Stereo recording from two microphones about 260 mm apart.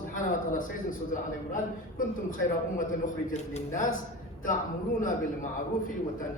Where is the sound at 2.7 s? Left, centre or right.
Left.